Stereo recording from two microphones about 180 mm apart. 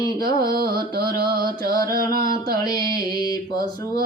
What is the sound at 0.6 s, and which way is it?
Music, 60° right (ahead or behind).